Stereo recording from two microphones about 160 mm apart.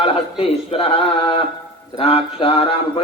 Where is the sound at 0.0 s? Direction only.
35° left (ahead or behind).